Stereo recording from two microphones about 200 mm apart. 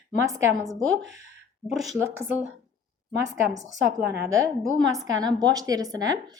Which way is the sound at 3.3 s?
15° right (ahead or behind).